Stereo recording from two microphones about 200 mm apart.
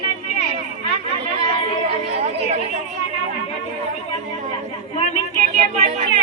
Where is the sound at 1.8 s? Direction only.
30° right (ahead or behind).